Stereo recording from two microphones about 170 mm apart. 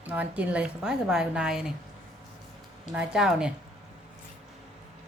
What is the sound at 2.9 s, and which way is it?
Speech, 5° right (ahead or behind).